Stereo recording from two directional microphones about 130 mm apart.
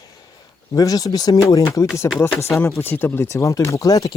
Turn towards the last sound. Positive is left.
turn(degrees=25)  # may be behind; listen again after turning